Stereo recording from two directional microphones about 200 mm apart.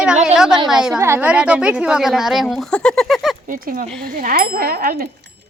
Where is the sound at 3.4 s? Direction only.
45° right (ahead or behind).